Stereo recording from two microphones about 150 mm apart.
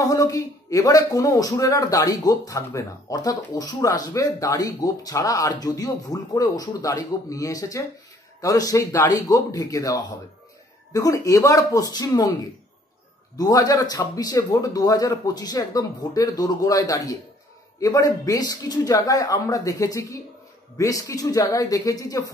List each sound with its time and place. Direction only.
0.1 s a man's voice: 20° left (ahead or behind)
13.4 s a man's voice: 25° left (ahead or behind)